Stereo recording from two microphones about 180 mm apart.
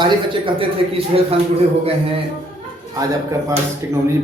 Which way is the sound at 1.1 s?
30° right (ahead or behind).